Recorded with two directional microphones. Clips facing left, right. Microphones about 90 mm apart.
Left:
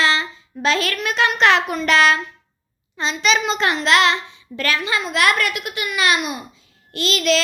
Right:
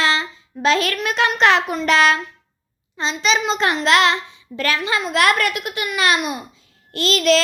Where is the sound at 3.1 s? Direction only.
25° right (ahead or behind).